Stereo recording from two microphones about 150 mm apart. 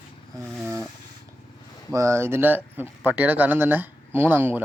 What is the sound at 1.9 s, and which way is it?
Speech, 20° right (ahead or behind).